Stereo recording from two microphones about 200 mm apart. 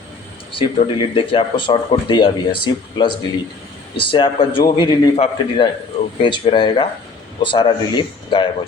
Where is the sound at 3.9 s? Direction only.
25° left (ahead or behind).